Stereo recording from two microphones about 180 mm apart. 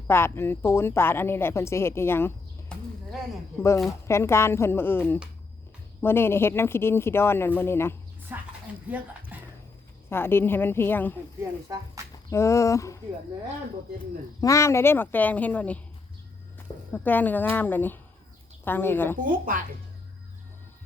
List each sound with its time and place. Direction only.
0.1 s speech: 15° left (ahead or behind)
4.0 s speech: 15° left (ahead or behind)
8.3 s a woman's voice: 10° right (ahead or behind)
9.3 s a sound: 10° right (ahead or behind)
10.1 s speech: 10° left (ahead or behind)
12.0 s a sound: 15° right (ahead or behind)
12.3 s speech: 15° left (ahead or behind)
14.4 s speech: 15° left (ahead or behind)
19.1 s speech: 50° right (ahead or behind)